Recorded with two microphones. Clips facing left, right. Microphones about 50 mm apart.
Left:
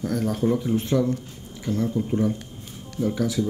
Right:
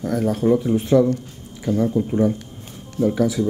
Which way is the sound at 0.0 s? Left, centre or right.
Centre.